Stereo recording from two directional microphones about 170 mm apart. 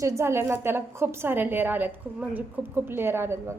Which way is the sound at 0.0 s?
15° right (ahead or behind).